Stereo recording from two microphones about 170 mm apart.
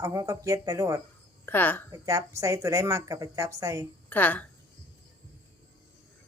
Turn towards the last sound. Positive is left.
turn(degrees=10)  # may be behind; listen again after turning